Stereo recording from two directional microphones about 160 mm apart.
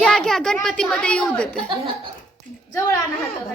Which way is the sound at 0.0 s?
5° left (ahead or behind).